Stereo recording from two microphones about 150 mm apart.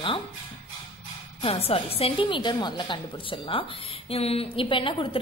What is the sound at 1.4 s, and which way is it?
A woman's voice, 40° left (ahead or behind).